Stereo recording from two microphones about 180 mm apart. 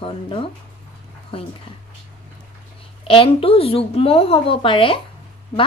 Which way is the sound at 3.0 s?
30° left (ahead or behind).